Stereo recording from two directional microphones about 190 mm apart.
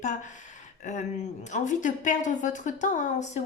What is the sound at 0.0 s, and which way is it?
Speech, 40° left (ahead or behind).